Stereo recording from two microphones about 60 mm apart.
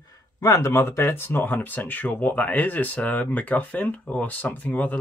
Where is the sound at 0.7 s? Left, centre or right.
Left.